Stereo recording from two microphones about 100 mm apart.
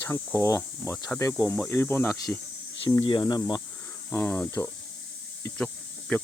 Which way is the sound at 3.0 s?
50° left (ahead or behind).